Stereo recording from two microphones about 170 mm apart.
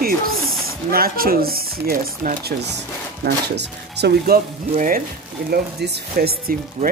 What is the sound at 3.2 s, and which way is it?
Speech, 80° right.